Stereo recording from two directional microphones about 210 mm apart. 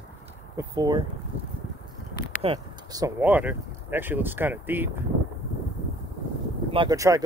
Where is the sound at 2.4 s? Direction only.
20° right (ahead or behind).